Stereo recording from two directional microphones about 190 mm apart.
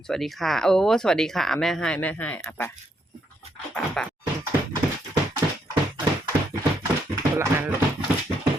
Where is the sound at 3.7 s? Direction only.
5° left (ahead or behind).